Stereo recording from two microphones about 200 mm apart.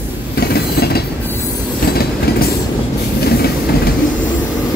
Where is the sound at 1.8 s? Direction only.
50° left (ahead or behind).